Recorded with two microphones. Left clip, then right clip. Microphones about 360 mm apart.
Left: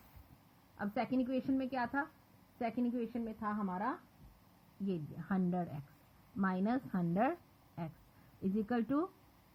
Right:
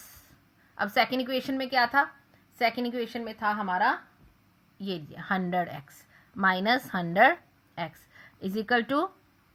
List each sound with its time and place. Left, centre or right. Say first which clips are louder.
0.8 s speech: right 12 dB; centre
8.5 s speech: right 11 dB; centre